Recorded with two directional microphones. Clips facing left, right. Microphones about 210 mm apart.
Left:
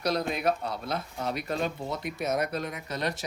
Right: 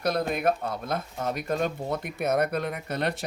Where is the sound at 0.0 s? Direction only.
55° right (ahead or behind).